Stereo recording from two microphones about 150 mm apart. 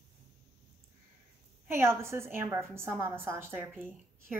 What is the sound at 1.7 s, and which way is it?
A woman's voice, 15° right (ahead or behind).